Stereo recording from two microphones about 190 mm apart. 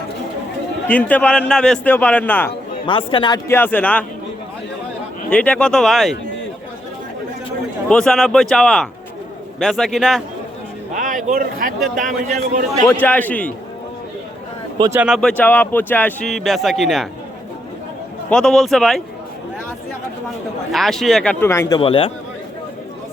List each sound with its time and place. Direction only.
0.9 s a man's voice: 10° left (ahead or behind)
2.8 s speech: 25° left (ahead or behind)
3.5 s a man's voice: 10° left (ahead or behind)
5.3 s speech: 5° left (ahead or behind)
7.9 s speech: 5° left (ahead or behind)
10.9 s a man's voice: 40° right (ahead or behind)
12.9 s a man's voice: 10° left (ahead or behind)
14.8 s speech: 15° right (ahead or behind)
15.0 s speech: centre (ahead or behind)
18.3 s speech: 5° left (ahead or behind)
20.7 s speech: centre (ahead or behind)
21.4 s a man's voice: 15° left (ahead or behind)
21.8 s speech: 30° left (ahead or behind)